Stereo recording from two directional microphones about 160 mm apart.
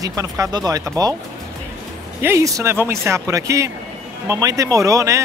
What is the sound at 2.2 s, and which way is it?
Speech, 15° right (ahead or behind).